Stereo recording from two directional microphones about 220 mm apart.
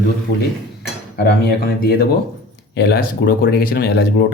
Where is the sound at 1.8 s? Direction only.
45° left (ahead or behind).